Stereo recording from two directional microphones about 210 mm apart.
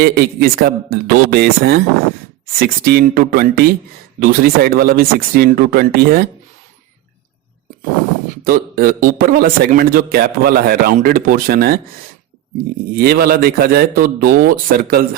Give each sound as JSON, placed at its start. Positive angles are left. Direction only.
{"t": 0.0, "sound": "a man's voice", "side_deg": -45}
{"t": 8.4, "sound": "a man's voice", "side_deg": -45}
{"t": 12.9, "sound": "a man's voice", "side_deg": -45}